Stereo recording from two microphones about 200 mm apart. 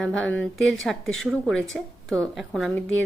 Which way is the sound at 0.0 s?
5° left (ahead or behind).